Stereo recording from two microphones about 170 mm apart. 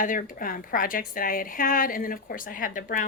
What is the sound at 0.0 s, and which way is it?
A woman's voice, 50° left (ahead or behind).